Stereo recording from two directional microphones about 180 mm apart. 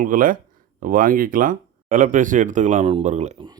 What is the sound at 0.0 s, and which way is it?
Speech, 50° right (ahead or behind).